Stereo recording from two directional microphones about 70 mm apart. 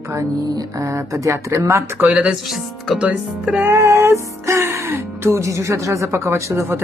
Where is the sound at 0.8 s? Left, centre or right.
Right.